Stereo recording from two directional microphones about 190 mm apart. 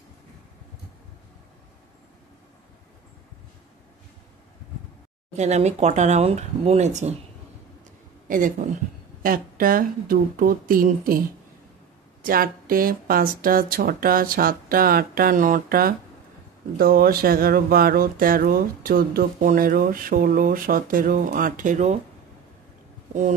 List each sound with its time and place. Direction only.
5.3 s speech: 35° right (ahead or behind)
8.3 s speech: 45° right (ahead or behind)